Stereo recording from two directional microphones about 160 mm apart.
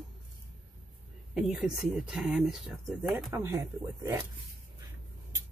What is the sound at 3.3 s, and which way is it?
Speech, 15° right (ahead or behind).